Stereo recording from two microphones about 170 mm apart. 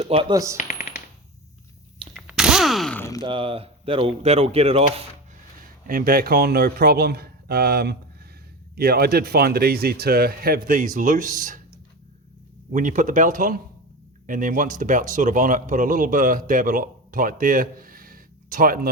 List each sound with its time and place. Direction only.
0.0 s coin: 35° right (ahead or behind)
0.5 s coin: 45° left (ahead or behind)
2.1 s a sound: 5° right (ahead or behind)
3.0 s a sound: 20° left (ahead or behind)
3.2 s speech: 30° right (ahead or behind)
5.9 s speech: 55° right (ahead or behind)
12.7 s speech: 50° right (ahead or behind)